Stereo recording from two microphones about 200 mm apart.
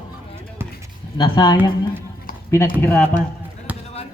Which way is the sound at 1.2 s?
25° left (ahead or behind).